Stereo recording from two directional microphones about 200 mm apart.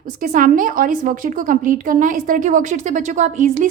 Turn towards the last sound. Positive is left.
turn(degrees=-40)  # may be behind; listen again after turning